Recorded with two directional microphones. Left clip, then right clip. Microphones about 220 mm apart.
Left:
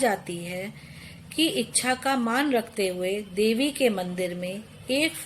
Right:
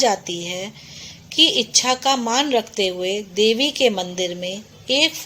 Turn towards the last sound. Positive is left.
turn(degrees=-20)  # may be behind; listen again after turning